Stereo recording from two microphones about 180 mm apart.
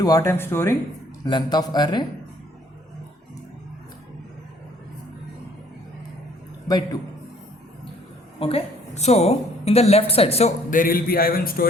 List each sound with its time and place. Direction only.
0.0 s speech: 20° left (ahead or behind)
1.2 s speech: 25° left (ahead or behind)
6.7 s speech: 20° left (ahead or behind)
8.4 s a woman's voice: 30° left (ahead or behind)
10.7 s speech: 50° left (ahead or behind)